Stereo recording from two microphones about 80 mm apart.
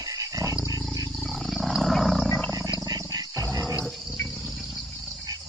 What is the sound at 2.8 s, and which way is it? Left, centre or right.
Wild animals, right.